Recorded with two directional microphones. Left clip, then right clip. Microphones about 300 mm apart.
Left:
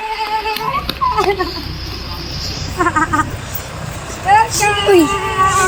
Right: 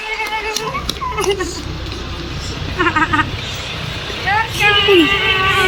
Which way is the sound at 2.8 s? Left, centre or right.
Centre.